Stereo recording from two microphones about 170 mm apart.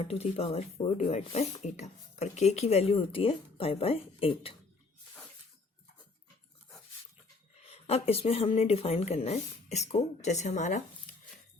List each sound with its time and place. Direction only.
0.0 s speech: 35° left (ahead or behind)
7.6 s speech: 35° left (ahead or behind)